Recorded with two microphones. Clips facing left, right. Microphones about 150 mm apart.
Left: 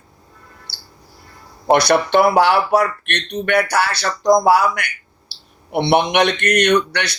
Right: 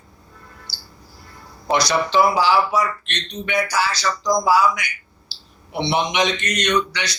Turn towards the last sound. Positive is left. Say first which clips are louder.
# left 4 dB
turn(degrees=60)  # may be behind; listen again after turning